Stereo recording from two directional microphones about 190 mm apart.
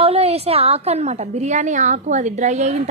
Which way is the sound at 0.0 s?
30° right (ahead or behind).